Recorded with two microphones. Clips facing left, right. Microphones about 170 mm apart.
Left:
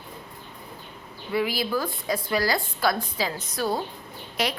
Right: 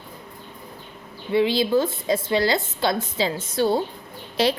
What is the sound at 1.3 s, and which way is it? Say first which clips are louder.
A woman's voice: right 6 dB; 25° right (ahead or behind).